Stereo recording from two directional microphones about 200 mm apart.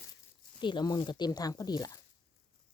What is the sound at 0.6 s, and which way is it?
Speech, 25° left (ahead or behind).